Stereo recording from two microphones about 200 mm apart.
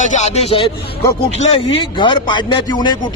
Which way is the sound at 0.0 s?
35° left (ahead or behind).